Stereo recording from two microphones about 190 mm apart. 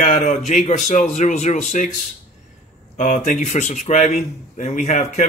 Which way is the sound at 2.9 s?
40° left (ahead or behind).